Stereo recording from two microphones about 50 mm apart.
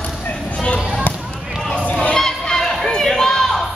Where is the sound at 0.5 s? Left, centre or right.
Left.